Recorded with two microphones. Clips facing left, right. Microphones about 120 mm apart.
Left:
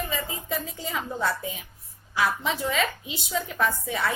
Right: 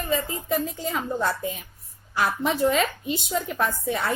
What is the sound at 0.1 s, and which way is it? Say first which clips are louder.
A woman's voice: right 6 dB; 50° right (ahead or behind).